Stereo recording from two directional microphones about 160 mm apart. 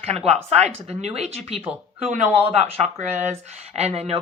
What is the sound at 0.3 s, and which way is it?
Speech, 45° right (ahead or behind).